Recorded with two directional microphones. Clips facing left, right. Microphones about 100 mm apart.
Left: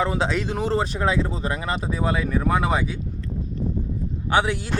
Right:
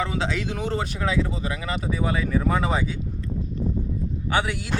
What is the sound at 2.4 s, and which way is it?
Speech, 10° left (ahead or behind).